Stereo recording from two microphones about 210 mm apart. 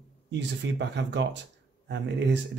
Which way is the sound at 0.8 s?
55° right (ahead or behind).